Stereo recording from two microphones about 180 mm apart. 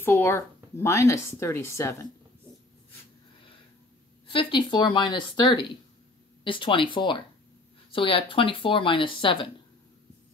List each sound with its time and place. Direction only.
0.0 s speech: 15° left (ahead or behind)
4.3 s speech: 25° left (ahead or behind)